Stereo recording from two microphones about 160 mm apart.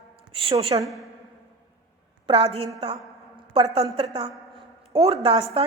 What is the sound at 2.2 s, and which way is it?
A woman's voice, 35° right (ahead or behind).